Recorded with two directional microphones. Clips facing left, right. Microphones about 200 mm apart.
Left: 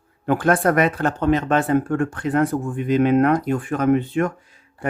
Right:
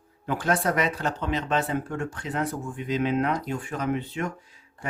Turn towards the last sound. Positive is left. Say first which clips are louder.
# left 8 dB
turn(degrees=55)  # may be behind; listen again after turning